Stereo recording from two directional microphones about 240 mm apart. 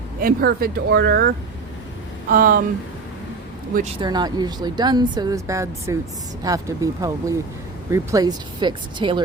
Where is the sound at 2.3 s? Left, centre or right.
Right.